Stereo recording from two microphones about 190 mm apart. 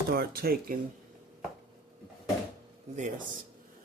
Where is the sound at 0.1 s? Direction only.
55° right (ahead or behind).